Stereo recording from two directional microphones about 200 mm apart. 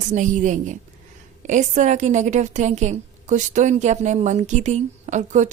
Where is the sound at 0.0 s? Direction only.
40° right (ahead or behind).